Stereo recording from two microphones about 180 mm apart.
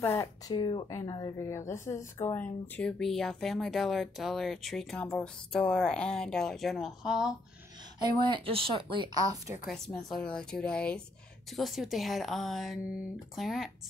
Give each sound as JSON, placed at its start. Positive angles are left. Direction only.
{"t": 0.0, "sound": "speech", "side_deg": 15}
{"t": 8.0, "sound": "speech", "side_deg": -25}
{"t": 9.7, "sound": "speech", "side_deg": 5}